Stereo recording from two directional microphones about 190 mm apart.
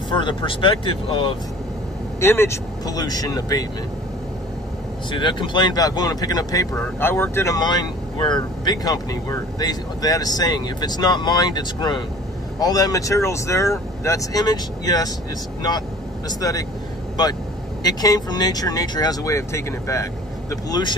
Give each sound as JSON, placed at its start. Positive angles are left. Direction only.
{"t": 0.1, "sound": "speech", "side_deg": 25}
{"t": 2.1, "sound": "speech", "side_deg": 15}
{"t": 5.1, "sound": "speech", "side_deg": 25}
{"t": 16.3, "sound": "speech", "side_deg": 20}
{"t": 17.8, "sound": "speech", "side_deg": 20}